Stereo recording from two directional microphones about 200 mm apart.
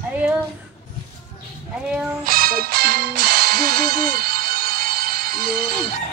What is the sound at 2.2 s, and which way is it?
Music, 45° right (ahead or behind).